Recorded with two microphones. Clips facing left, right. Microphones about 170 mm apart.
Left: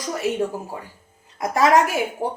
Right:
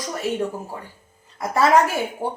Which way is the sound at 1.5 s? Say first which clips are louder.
Even; 15° left (ahead or behind).